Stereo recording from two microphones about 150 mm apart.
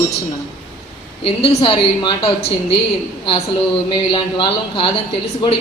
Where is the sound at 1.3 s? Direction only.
35° left (ahead or behind).